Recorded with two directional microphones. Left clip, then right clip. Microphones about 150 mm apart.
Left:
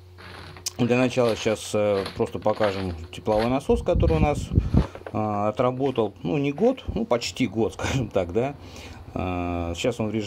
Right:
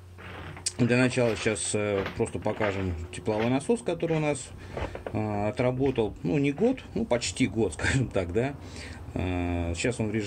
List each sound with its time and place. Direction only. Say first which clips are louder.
0.7 s speech: left 3 dB; 25° left (ahead or behind)